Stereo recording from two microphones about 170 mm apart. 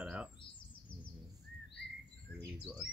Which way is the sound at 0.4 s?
30° left (ahead or behind).